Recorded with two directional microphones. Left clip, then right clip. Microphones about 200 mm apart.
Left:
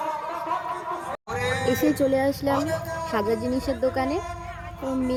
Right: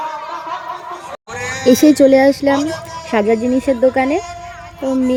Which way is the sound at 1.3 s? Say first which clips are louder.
Right 3 dB; 40° left (ahead or behind).